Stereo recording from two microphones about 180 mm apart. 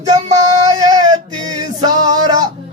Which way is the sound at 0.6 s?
20° right (ahead or behind).